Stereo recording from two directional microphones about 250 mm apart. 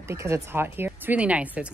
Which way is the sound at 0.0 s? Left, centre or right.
Centre.